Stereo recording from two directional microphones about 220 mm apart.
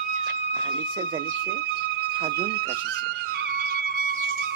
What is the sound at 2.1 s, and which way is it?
Music, 40° right (ahead or behind).